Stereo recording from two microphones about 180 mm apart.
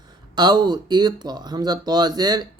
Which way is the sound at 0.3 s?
25° right (ahead or behind).